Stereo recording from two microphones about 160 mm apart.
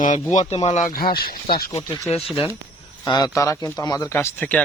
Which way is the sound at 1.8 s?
25° left (ahead or behind).